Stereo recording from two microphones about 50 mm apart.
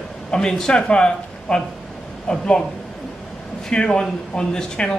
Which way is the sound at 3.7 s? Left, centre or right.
Centre.